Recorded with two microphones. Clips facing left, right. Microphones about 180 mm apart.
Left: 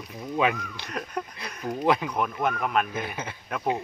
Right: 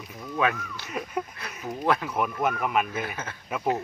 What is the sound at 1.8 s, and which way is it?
Speech, 15° left (ahead or behind).